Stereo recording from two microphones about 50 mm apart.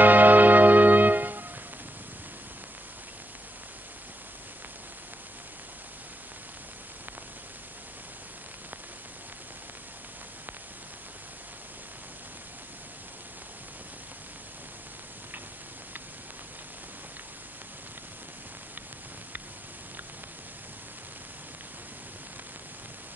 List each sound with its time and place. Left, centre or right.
0.0 s music: right